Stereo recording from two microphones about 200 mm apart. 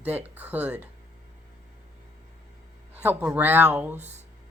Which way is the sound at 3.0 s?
10° right (ahead or behind).